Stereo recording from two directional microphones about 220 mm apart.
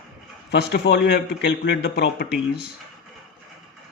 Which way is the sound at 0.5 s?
50° left (ahead or behind).